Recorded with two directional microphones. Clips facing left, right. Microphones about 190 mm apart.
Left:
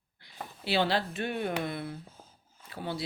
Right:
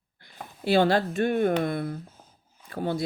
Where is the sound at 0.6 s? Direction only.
45° right (ahead or behind).